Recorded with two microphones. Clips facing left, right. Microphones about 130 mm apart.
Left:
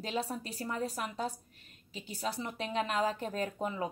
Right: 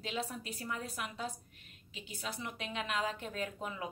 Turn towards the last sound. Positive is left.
turn(degrees=35)  # may be behind; listen again after turning